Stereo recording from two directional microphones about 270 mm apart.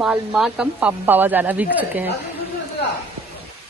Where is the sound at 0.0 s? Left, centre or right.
Centre.